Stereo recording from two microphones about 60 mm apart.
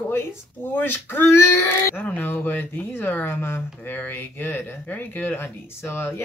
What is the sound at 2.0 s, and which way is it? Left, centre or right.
Speech, left.